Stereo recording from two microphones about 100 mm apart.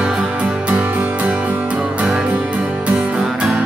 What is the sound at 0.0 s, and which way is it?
Music, 10° right (ahead or behind).